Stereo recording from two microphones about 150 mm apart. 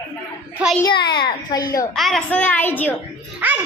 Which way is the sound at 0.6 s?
5° right (ahead or behind).